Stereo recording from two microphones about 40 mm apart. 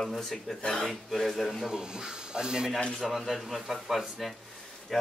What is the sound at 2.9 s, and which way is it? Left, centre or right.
Speech, centre.